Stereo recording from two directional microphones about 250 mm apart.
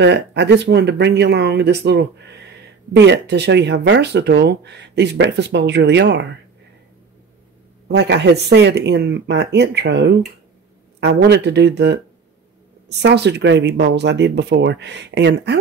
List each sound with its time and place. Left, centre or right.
0.0 s speech: right
7.9 s speech: right